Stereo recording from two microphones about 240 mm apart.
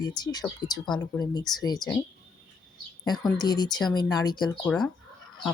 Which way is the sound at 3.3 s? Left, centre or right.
Centre.